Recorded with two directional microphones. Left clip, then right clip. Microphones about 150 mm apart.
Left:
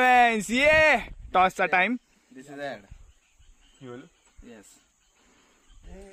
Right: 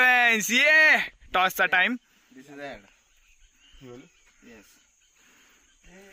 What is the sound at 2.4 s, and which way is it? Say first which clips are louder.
Speech: left 4 dB; 40° left (ahead or behind).